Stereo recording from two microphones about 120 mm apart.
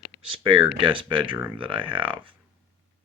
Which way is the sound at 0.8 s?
45° right (ahead or behind).